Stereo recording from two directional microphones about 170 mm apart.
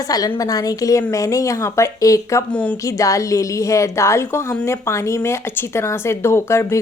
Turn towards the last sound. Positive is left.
turn(degrees=15)  # may be behind; listen again after turning